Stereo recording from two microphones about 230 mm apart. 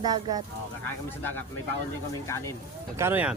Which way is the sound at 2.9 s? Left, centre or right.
Centre.